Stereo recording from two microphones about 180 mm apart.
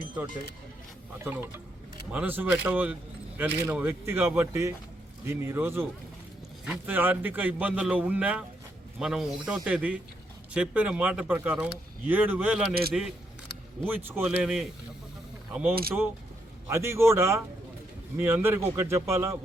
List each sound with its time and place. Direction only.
1.2 s speech: 10° right (ahead or behind)
15.7 s speech: 55° right (ahead or behind)
16.6 s speech: 15° right (ahead or behind)